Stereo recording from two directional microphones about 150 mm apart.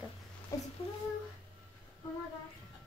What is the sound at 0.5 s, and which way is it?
Speech, 20° left (ahead or behind).